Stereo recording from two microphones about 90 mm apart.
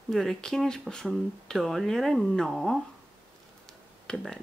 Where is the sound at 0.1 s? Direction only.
5° left (ahead or behind).